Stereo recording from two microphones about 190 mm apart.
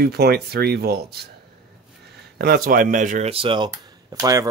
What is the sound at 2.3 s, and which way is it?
Speech, 55° right (ahead or behind).